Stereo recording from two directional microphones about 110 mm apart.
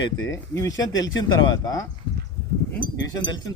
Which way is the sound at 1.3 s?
45° left (ahead or behind).